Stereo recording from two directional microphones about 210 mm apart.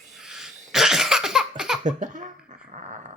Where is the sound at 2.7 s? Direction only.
35° right (ahead or behind).